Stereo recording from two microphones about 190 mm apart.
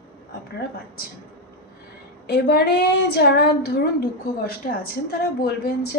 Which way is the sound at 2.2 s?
60° left (ahead or behind).